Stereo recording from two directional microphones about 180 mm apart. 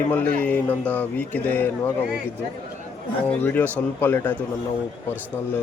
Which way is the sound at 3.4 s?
10° left (ahead or behind).